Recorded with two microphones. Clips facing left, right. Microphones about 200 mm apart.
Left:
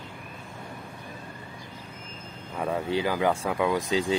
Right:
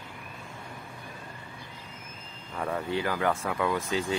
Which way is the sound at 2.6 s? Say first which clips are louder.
Left 3 dB; 15° left (ahead or behind).